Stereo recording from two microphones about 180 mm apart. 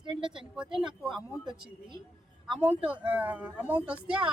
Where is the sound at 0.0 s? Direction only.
25° right (ahead or behind).